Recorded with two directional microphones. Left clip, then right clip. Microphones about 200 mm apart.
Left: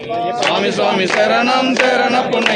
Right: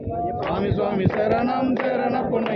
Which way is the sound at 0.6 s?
20° left (ahead or behind).